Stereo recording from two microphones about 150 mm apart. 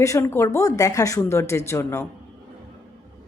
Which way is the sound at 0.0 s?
20° left (ahead or behind).